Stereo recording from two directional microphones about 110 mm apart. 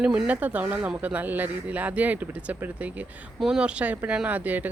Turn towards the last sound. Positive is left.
turn(degrees=-15)  # may be behind; listen again after turning